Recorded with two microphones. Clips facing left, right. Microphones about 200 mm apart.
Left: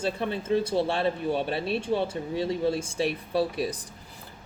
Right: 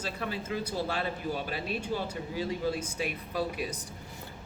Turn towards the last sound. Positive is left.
turn(degrees=35)  # may be behind; listen again after turning